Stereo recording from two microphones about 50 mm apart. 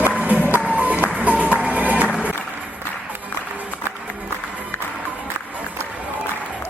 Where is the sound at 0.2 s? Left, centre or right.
Right.